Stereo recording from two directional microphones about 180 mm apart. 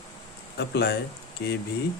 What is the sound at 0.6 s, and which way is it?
Speech, 65° left (ahead or behind).